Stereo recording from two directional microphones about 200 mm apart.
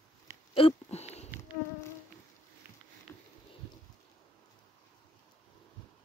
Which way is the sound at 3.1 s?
15° left (ahead or behind).